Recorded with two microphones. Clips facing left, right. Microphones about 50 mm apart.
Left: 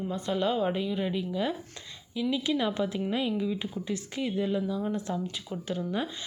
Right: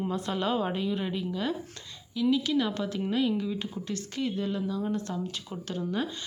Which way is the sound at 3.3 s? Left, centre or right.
Centre.